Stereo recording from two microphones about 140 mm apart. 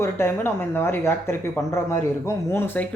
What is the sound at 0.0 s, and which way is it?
Speech, 15° left (ahead or behind).